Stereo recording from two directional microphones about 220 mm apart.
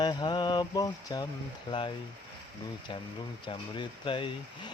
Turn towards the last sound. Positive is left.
turn(degrees=20)  # may be behind; listen again after turning